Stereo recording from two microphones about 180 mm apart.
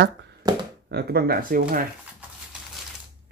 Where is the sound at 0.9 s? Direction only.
65° right (ahead or behind).